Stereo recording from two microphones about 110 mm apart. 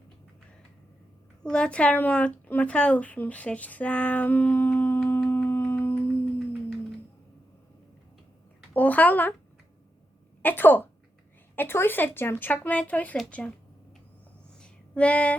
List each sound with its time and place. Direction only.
1.5 s speech: 10° left (ahead or behind)
8.7 s speech: 15° left (ahead or behind)
10.4 s speech: 20° left (ahead or behind)
14.6 s a sound: 10° left (ahead or behind)